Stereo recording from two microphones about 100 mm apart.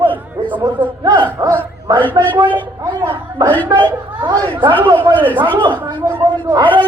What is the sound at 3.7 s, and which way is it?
Speech, 45° right (ahead or behind).